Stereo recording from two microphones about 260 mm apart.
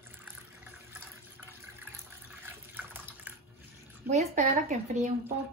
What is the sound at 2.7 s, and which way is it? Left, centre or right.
Water, centre.